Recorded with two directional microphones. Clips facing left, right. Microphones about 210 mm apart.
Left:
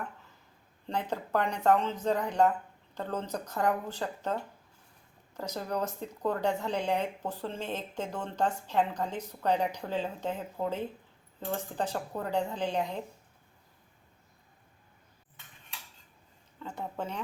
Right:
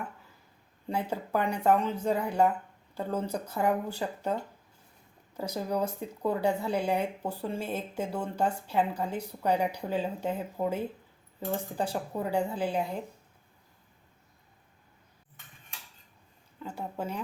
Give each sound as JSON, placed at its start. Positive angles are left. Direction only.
{"t": 0.9, "sound": "speech", "side_deg": -10}
{"t": 16.6, "sound": "speech", "side_deg": -10}